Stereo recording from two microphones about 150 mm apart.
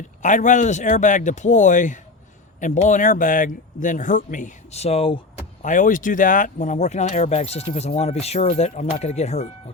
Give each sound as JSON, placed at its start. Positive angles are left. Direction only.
{"t": 0.2, "sound": "speech", "side_deg": 55}
{"t": 5.6, "sound": "speech", "side_deg": 60}